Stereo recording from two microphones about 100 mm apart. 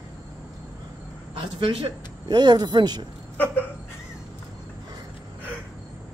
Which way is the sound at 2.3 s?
45° right (ahead or behind).